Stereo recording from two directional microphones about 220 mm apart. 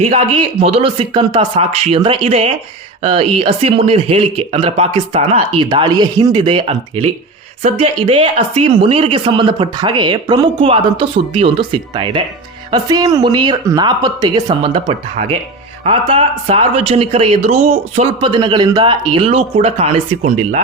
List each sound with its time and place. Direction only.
0.0 s speech: 25° right (ahead or behind)